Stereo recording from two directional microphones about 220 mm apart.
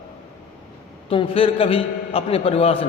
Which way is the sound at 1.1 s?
25° left (ahead or behind).